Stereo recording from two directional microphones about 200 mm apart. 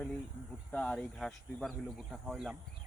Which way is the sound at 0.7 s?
5° left (ahead or behind).